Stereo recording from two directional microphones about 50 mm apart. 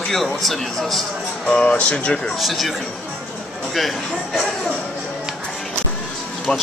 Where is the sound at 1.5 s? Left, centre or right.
Left.